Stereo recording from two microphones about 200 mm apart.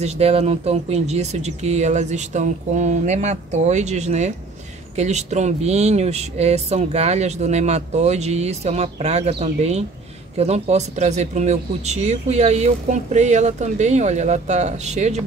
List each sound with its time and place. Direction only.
0.0 s speech: 30° right (ahead or behind)